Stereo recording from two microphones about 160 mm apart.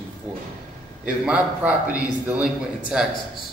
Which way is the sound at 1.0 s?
10° right (ahead or behind).